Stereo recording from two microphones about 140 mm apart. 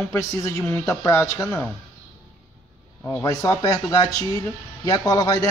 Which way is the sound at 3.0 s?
20° left (ahead or behind).